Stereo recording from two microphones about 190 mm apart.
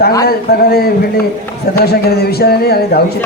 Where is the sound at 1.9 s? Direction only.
55° left (ahead or behind).